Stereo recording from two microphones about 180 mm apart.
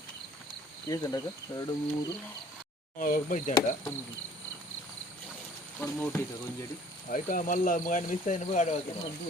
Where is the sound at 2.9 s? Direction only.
50° left (ahead or behind).